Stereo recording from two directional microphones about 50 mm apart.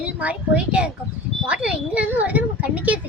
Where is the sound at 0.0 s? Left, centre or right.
Right.